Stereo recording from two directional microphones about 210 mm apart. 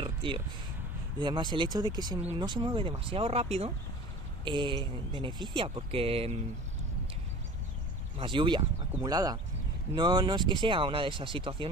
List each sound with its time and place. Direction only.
0.0 s a sound: 25° right (ahead or behind)
1.2 s speech: 20° right (ahead or behind)
8.2 s speech: 25° right (ahead or behind)